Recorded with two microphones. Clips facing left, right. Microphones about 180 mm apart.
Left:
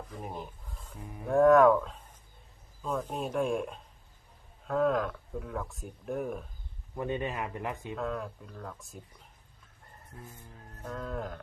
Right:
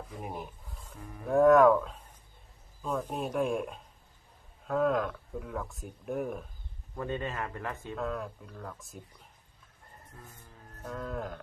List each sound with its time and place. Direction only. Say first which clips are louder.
0.1 s speech: even; 10° right (ahead or behind)
0.9 s a man's voice: left 1 dB; 15° left (ahead or behind)
1.3 s speech: even; centre (ahead or behind)
6.9 s a man's voice: left 2 dB; 15° left (ahead or behind)
7.9 s speech: right 3 dB; centre (ahead or behind)
10.8 s speech: even; centre (ahead or behind)